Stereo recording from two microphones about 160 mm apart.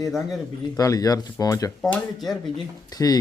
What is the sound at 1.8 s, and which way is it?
Speech, centre (ahead or behind).